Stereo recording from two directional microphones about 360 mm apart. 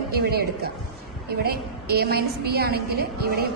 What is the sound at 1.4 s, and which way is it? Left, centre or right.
A woman's voice, right.